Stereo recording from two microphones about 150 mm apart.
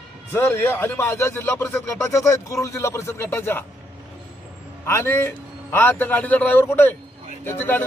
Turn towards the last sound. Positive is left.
turn(degrees=15)  # may be behind; listen again after turning